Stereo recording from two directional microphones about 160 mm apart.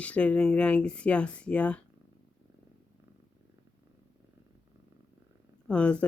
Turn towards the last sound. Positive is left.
turn(degrees=5)  # may be behind; listen again after turning